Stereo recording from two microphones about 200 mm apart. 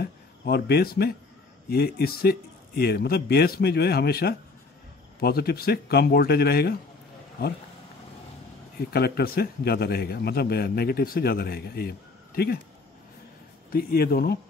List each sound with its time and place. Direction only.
0.0 s a man's voice: 50° left (ahead or behind)
8.7 s a man's voice: 50° left (ahead or behind)
13.7 s a man's voice: 50° left (ahead or behind)